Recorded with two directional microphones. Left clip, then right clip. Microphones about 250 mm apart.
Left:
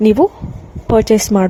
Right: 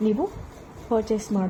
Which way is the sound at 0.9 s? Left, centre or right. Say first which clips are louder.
Left 13 dB; left.